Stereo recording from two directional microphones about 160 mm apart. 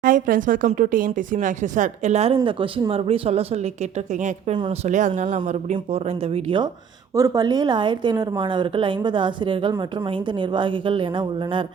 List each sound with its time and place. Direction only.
0.0 s a woman's voice: 60° right (ahead or behind); by 6.7 s 35° right (ahead or behind)
7.2 s a woman's voice: 25° right (ahead or behind)